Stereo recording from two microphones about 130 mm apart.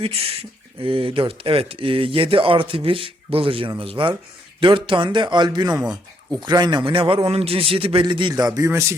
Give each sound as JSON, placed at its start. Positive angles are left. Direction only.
{"t": 0.0, "sound": "a man's voice", "side_deg": -50}